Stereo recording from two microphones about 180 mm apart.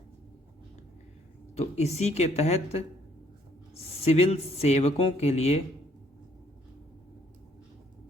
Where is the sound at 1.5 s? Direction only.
35° left (ahead or behind).